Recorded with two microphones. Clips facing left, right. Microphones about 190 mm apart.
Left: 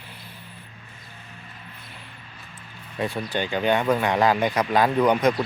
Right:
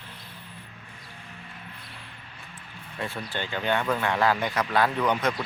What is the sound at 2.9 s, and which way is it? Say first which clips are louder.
Speech: left 6 dB; 15° left (ahead or behind).